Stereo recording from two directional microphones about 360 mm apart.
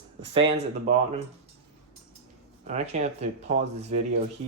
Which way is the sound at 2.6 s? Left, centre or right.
Centre.